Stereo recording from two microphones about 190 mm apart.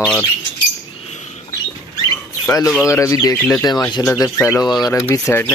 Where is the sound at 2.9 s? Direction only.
15° left (ahead or behind).